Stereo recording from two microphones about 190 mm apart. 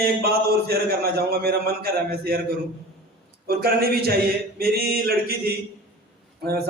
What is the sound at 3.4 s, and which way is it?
A man's voice, 55° right (ahead or behind).